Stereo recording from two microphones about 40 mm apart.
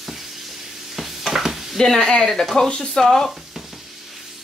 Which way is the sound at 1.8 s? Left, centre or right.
Centre.